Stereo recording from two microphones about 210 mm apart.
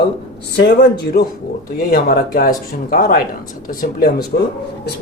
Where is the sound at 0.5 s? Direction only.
55° left (ahead or behind).